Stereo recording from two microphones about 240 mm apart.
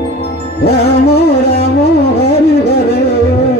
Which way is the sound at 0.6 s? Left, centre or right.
Left.